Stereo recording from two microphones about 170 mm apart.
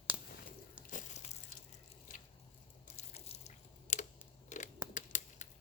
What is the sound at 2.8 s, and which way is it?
Crunch, 40° left (ahead or behind).